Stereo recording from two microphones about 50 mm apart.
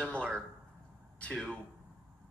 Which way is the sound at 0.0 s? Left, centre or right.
Left.